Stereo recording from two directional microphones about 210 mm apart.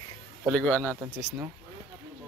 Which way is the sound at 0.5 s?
10° left (ahead or behind).